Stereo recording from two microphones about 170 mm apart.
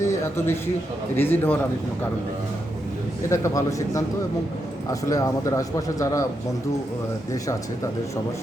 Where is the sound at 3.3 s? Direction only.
15° left (ahead or behind).